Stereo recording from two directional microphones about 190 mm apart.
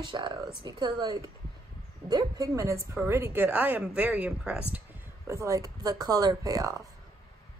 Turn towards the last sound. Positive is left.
turn(degrees=-15)  # may be behind; listen again after turning